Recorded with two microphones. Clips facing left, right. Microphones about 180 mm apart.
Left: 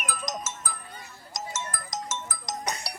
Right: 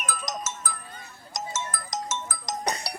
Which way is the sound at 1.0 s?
50° right (ahead or behind).